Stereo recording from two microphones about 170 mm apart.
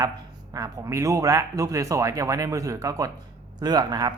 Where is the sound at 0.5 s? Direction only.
20° right (ahead or behind).